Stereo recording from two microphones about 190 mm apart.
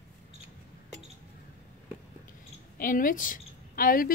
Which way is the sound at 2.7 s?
45° left (ahead or behind).